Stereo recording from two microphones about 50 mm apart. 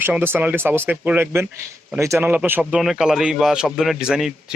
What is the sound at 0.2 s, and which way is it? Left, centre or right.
Speech, right.